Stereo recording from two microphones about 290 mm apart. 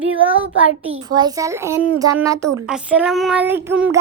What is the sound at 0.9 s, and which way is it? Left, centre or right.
A child's voice, centre.